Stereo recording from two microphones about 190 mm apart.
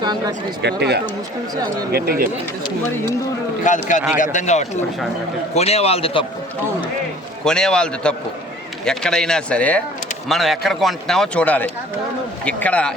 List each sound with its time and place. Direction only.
0.0 s speech: 20° right (ahead or behind)
0.6 s speech: 60° right (ahead or behind)
3.6 s speech: 40° left (ahead or behind)
7.4 s a man's voice: 5° left (ahead or behind)